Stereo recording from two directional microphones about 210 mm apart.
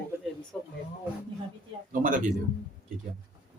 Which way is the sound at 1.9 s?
40° right (ahead or behind).